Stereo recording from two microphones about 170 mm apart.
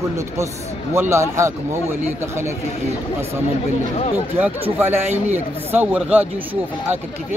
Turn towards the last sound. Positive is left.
turn(degrees=-10)  # may be behind; listen again after turning